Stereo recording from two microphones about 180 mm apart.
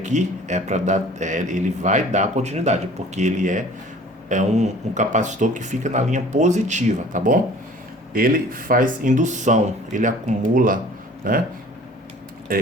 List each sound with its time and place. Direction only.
0.0 s speech: 40° right (ahead or behind)
12.5 s speech: 55° right (ahead or behind)